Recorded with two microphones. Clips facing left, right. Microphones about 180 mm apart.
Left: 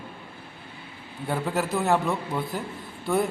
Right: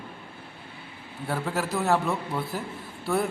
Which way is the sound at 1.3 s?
Centre (ahead or behind).